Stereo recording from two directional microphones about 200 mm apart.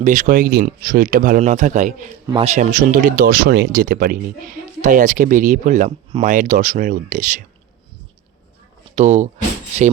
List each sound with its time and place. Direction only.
0.0 s speech: 40° right (ahead or behind)
9.0 s speech: 35° right (ahead or behind)